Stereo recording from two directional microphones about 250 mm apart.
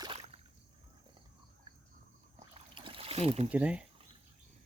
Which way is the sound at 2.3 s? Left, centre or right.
Centre.